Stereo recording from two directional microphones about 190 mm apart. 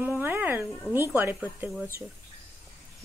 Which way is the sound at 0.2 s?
10° right (ahead or behind).